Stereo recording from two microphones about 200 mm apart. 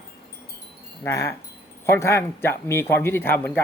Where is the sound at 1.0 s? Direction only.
15° left (ahead or behind).